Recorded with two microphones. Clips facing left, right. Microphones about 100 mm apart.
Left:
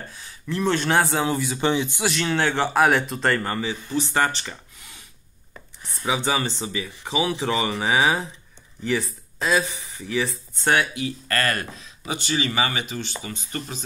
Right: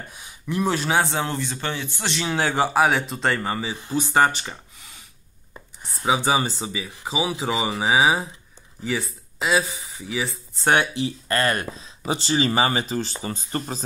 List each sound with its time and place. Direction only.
0.1 s speech: 15° right (ahead or behind); by 1.6 s 5° left (ahead or behind)
1.6 s speech: 15° left (ahead or behind)
2.2 s speech: 10° right (ahead or behind)
5.9 s speech: 30° right (ahead or behind)
6.2 s speech: 10° right (ahead or behind)
10.7 s speech: 25° right (ahead or behind)